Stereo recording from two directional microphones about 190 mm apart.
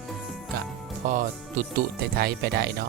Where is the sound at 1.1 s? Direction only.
45° right (ahead or behind).